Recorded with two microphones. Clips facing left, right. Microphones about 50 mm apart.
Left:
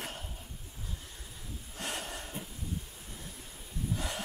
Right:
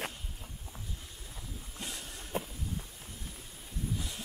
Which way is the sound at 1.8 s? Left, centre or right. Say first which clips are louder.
Left 6 dB; left.